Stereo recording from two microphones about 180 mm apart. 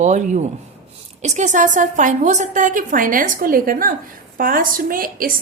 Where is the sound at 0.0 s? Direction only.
40° right (ahead or behind).